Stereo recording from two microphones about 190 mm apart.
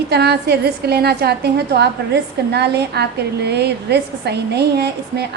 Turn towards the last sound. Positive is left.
turn(degrees=-60)  # may be behind; listen again after turning